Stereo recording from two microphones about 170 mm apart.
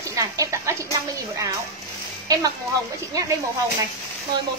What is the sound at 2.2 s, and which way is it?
A woman's voice, 20° right (ahead or behind).